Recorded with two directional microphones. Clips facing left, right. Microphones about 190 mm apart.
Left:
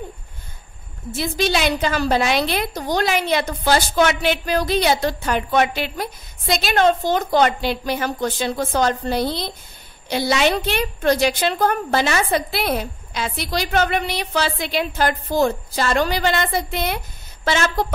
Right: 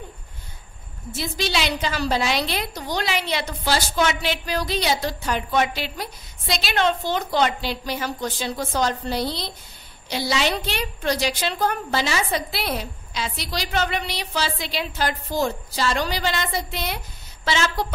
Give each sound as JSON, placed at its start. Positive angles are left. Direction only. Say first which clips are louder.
{"t": 1.1, "sound": "a woman's voice", "louder": "left 5 dB", "side_deg": 55}